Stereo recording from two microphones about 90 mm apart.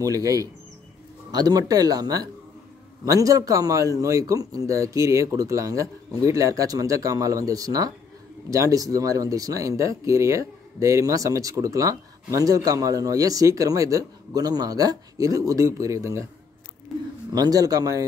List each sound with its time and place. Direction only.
0.0 s speech: 40° right (ahead or behind)
17.3 s speech: 45° right (ahead or behind)